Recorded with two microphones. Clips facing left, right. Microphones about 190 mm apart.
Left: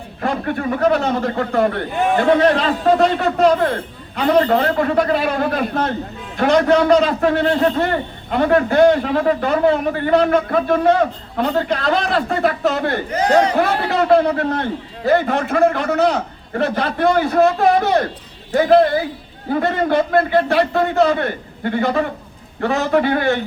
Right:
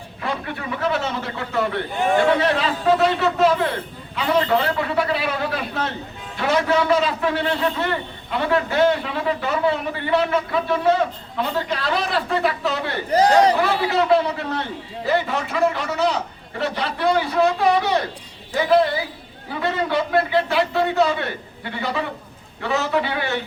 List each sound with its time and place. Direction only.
0.2 s a man's voice: 45° left (ahead or behind)
13.1 s speech: 35° right (ahead or behind)
13.6 s a man's voice: 55° left (ahead or behind)